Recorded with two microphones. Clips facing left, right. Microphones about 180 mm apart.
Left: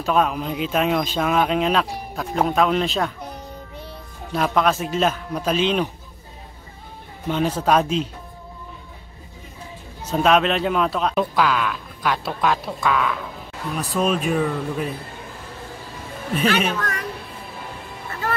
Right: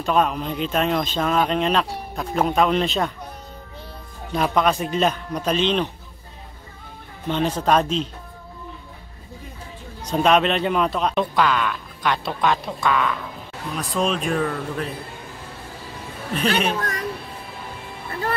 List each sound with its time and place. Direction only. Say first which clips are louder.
0.0 s speech: even; 5° left (ahead or behind)
4.3 s speech: even; centre (ahead or behind)
7.2 s speech: even; 5° left (ahead or behind)
10.0 s speech: even; centre (ahead or behind)
16.6 s speech: right 1 dB; 35° right (ahead or behind)